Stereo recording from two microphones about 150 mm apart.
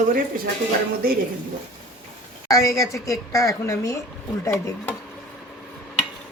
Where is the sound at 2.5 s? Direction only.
20° left (ahead or behind).